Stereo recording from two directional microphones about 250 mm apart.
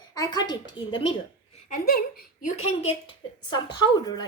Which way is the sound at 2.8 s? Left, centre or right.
Centre.